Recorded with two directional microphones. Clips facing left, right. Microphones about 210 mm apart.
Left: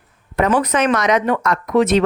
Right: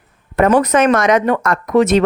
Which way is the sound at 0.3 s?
45° right (ahead or behind).